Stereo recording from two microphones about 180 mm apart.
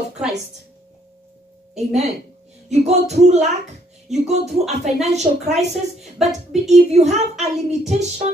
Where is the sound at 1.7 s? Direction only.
35° right (ahead or behind).